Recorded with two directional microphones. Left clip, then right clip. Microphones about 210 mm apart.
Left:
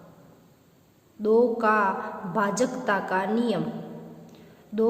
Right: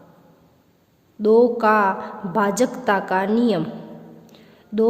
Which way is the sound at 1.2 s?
40° right (ahead or behind).